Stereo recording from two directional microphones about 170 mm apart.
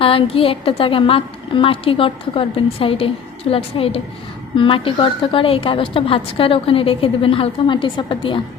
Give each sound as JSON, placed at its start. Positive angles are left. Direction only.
{"t": 0.0, "sound": "a woman's voice", "side_deg": 30}